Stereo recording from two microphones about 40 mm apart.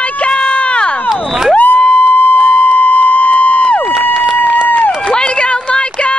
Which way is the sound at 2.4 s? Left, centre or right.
Left.